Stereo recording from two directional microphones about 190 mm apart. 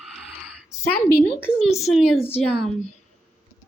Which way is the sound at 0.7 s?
Centre (ahead or behind).